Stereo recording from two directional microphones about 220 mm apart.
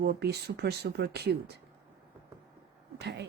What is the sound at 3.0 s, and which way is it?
Speech, 50° right (ahead or behind).